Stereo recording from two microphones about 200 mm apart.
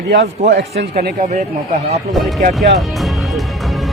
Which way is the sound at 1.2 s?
40° right (ahead or behind).